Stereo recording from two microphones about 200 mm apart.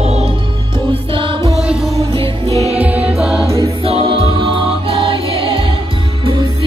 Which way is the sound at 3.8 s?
25° right (ahead or behind).